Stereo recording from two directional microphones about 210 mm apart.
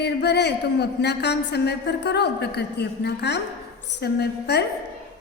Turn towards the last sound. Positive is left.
turn(degrees=50)  # may be behind; listen again after turning